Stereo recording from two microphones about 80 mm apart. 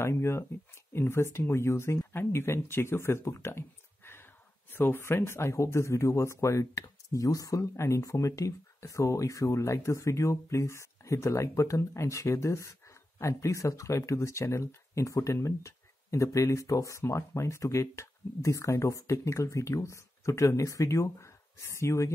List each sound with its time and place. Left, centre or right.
0.0 s speech: left